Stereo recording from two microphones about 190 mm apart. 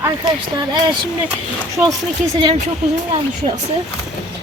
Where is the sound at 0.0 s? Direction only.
20° right (ahead or behind).